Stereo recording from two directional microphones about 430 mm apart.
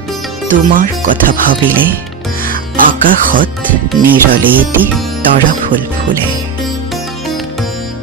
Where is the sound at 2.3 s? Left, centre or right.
Centre.